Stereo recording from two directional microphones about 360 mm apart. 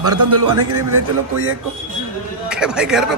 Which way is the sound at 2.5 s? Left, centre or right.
Centre.